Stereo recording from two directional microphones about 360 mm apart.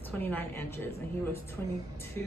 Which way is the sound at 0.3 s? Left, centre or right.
Centre.